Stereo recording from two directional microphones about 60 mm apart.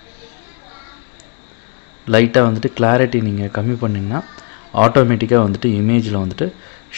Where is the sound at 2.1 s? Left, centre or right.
Right.